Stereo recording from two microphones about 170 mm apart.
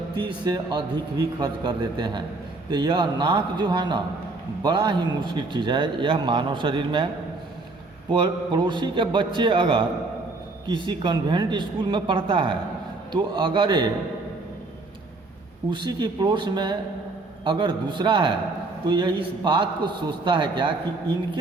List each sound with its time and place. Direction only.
0.2 s a man's voice: 25° right (ahead or behind)
8.1 s a man's voice: 25° right (ahead or behind)
15.7 s a man's voice: 25° right (ahead or behind)